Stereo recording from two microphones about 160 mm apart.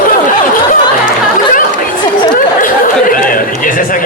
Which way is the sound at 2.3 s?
55° left (ahead or behind).